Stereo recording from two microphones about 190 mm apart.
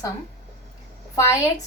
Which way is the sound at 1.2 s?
15° left (ahead or behind).